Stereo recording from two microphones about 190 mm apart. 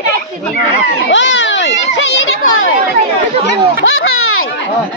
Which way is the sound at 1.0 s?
75° left (ahead or behind).